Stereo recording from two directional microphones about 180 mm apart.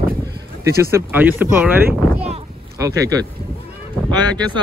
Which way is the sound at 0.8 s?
10° right (ahead or behind).